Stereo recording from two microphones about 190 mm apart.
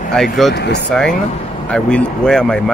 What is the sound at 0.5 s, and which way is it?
Speech, 60° left (ahead or behind).